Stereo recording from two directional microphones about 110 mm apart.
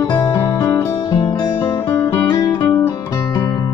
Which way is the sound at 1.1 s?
40° left (ahead or behind).